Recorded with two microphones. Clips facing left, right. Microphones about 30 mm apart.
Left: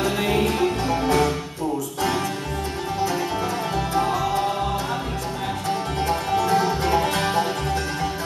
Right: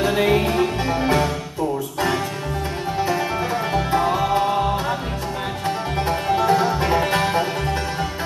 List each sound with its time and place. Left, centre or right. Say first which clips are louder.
0.8 s music: right 1 dB; right
3.7 s music: right 3 dB; right
6.0 s music: right 3 dB; right